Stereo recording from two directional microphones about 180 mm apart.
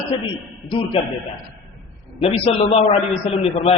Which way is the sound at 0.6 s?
25° left (ahead or behind).